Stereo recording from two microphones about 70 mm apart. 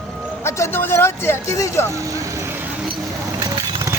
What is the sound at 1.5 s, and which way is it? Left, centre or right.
Speech, left.